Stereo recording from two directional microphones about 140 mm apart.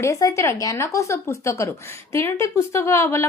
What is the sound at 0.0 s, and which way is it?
A woman's voice, 25° left (ahead or behind).